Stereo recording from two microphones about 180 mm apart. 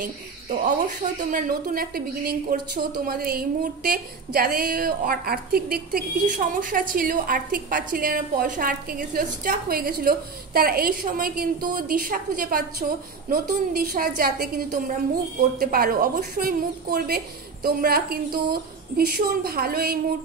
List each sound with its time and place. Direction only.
0.0 s a woman's voice: 50° right (ahead or behind)